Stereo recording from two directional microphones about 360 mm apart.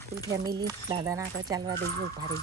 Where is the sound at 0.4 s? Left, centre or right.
Centre.